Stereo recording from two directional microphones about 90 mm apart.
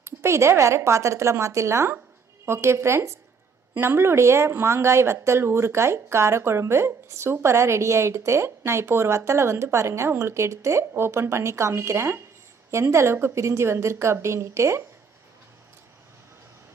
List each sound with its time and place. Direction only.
0.0 s speech: 30° right (ahead or behind)